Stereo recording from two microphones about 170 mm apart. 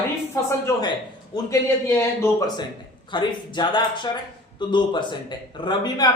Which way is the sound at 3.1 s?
25° left (ahead or behind).